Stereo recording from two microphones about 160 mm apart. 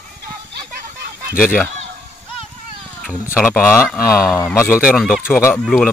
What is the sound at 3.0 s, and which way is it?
Cat, 5° right (ahead or behind).